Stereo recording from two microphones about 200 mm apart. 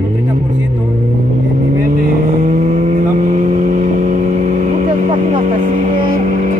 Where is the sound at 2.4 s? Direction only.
40° right (ahead or behind).